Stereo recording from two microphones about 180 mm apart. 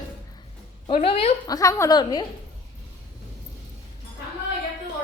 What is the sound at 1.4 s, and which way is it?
Speech, 20° left (ahead or behind).